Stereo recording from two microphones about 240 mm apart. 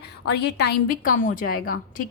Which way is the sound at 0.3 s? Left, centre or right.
Left.